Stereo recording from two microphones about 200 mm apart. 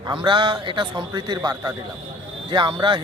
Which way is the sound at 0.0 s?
25° right (ahead or behind).